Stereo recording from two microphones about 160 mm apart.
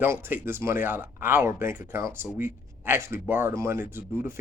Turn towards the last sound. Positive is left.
turn(degrees=-15)  # may be behind; listen again after turning